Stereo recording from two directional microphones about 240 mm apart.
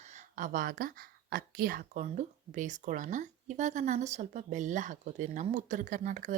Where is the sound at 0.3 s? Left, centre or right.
Right.